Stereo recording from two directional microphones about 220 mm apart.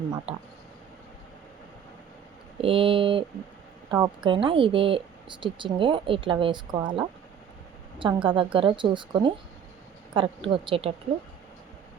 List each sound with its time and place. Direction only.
0.3 s speech: 25° right (ahead or behind)
2.6 s speech: 25° right (ahead or behind)
7.9 s speech: 20° right (ahead or behind)